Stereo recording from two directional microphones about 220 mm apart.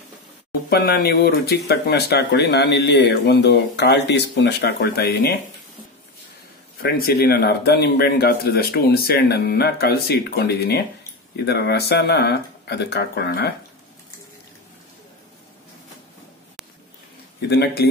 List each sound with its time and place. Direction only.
0.7 s speech: 45° left (ahead or behind)
6.8 s speech: 45° left (ahead or behind)
17.4 s speech: 50° left (ahead or behind)